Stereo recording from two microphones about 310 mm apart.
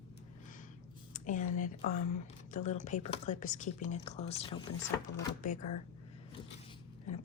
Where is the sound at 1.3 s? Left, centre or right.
Left.